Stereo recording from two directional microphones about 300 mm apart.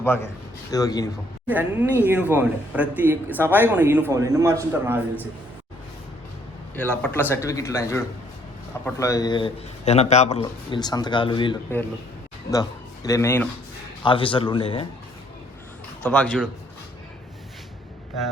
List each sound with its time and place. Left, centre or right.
0.7 s a man's voice: centre
1.5 s a man's voice: centre
6.8 s a man's voice: centre
16.0 s speech: centre